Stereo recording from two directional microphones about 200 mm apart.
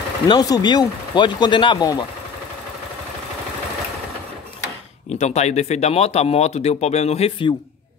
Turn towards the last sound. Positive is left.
turn(degrees=25)  # may be behind; listen again after turning